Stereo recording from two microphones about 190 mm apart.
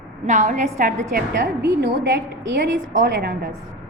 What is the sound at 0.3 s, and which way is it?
A woman's voice, 40° right (ahead or behind).